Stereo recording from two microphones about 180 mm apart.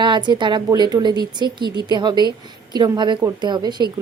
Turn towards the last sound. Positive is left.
turn(degrees=-25)  # may be behind; listen again after turning